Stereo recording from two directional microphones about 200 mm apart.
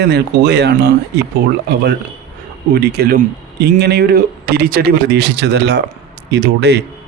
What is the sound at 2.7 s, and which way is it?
Speech, 50° right (ahead or behind).